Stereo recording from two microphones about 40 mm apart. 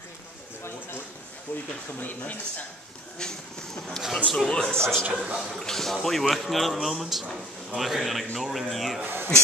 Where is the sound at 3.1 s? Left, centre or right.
Centre.